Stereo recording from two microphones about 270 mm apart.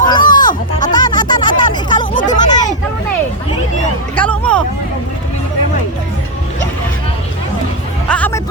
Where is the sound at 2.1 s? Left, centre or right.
Left.